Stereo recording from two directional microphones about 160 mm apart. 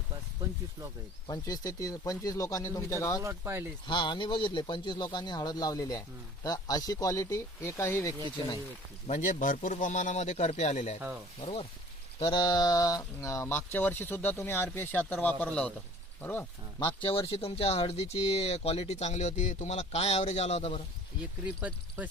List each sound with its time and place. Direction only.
1.3 s speech: 20° left (ahead or behind)
3.2 s speech: 15° right (ahead or behind)
3.8 s speech: 30° left (ahead or behind)
9.0 s speech: 50° left (ahead or behind); by 16.5 s 10° left (ahead or behind)
16.8 s speech: 30° left (ahead or behind)
21.4 s speech: 10° right (ahead or behind)